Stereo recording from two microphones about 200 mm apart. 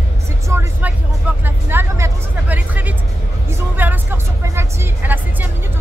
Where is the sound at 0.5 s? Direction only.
10° right (ahead or behind).